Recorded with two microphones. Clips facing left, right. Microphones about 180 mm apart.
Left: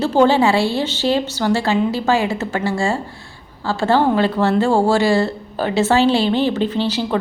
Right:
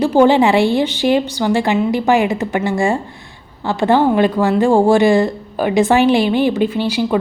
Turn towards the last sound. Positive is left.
turn(degrees=-10)  # may be behind; listen again after turning